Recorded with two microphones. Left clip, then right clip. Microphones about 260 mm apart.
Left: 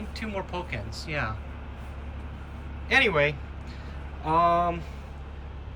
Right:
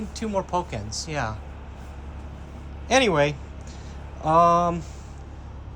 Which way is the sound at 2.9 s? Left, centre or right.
Centre.